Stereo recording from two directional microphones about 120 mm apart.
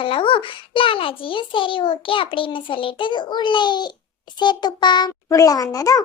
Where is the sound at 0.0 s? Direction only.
45° left (ahead or behind).